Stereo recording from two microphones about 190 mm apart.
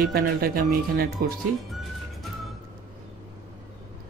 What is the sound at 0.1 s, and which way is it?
Speech, 50° right (ahead or behind).